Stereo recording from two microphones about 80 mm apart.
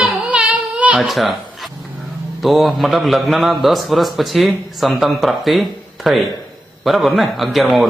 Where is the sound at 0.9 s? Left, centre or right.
Centre.